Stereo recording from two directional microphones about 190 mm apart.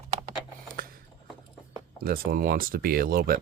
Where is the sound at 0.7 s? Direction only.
50° right (ahead or behind).